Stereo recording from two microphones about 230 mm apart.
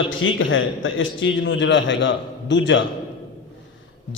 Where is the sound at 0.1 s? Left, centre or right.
Left.